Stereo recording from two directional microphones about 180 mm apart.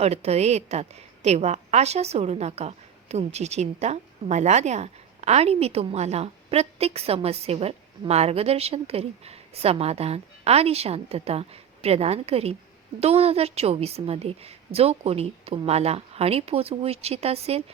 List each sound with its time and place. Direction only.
0.0 s a woman's voice: 35° right (ahead or behind)